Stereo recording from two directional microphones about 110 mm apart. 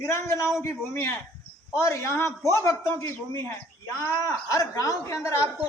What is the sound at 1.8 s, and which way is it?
A man's voice, 25° left (ahead or behind).